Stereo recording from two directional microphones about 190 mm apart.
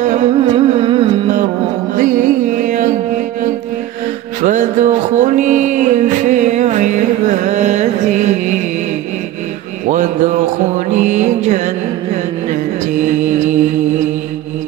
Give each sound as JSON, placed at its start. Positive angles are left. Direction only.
{"t": 0.0, "sound": "music", "side_deg": -40}
{"t": 2.0, "sound": "music", "side_deg": -40}
{"t": 4.4, "sound": "music", "side_deg": -40}
{"t": 9.8, "sound": "a sound", "side_deg": -40}
{"t": 10.9, "sound": "music", "side_deg": -40}